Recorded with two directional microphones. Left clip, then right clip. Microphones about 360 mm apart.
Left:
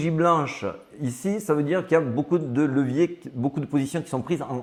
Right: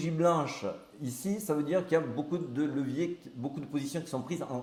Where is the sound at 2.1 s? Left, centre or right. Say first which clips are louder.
Left 10 dB; left.